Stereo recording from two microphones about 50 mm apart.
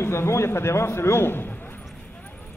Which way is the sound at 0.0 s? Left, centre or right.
Left.